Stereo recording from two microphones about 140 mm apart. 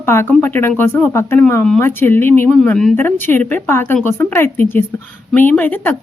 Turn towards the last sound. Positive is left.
turn(degrees=10)  # may be behind; listen again after turning